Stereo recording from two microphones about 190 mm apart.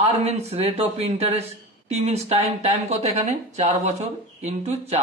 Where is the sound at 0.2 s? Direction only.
35° right (ahead or behind).